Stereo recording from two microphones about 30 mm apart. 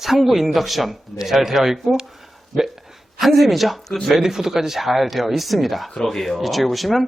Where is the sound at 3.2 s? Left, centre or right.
Centre.